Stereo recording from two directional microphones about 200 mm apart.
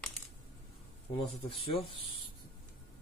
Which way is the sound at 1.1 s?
25° left (ahead or behind).